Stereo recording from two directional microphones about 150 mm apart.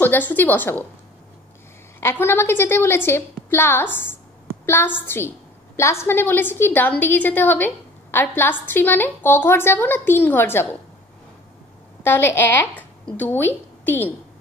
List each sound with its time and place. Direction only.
0.0 s a woman's voice: 10° left (ahead or behind)
2.0 s a woman's voice: 15° left (ahead or behind)
12.0 s a woman's voice: 15° left (ahead or behind)